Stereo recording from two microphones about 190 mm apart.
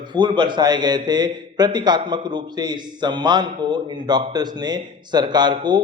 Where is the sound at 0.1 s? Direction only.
25° right (ahead or behind).